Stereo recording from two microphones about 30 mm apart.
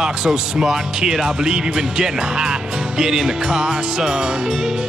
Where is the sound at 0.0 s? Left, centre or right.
Right.